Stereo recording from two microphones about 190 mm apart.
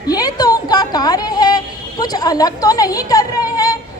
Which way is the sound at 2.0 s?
20° left (ahead or behind).